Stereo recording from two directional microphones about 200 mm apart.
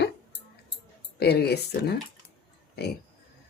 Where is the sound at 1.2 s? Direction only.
55° left (ahead or behind).